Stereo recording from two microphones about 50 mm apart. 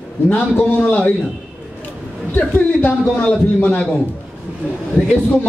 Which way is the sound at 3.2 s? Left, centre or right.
Centre.